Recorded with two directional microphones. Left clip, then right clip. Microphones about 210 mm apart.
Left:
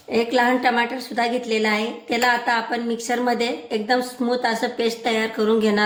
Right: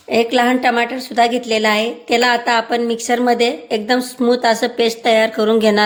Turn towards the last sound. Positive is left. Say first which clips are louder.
# right 6 dB
turn(degrees=-45)  # may be behind; listen again after turning